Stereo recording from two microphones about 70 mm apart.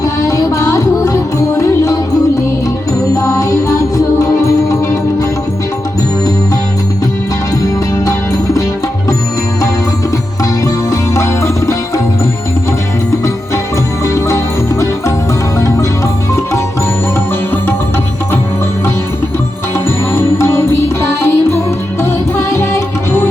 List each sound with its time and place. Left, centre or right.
0.0 s music: left
3.2 s music: left
11.1 s music: left
14.0 s music: left
20.1 s music: left